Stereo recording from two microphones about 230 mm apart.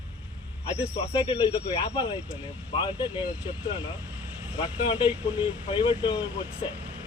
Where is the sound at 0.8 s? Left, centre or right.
Left.